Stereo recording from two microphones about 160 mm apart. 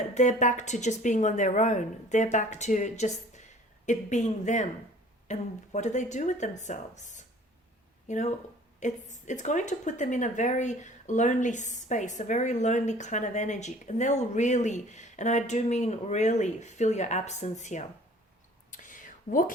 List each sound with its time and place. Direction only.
0.1 s speech: 50° left (ahead or behind)
18.7 s whispering: 55° left (ahead or behind)